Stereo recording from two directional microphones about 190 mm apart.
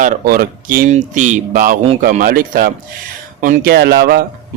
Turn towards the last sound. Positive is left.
turn(degrees=-55)  # may be behind; listen again after turning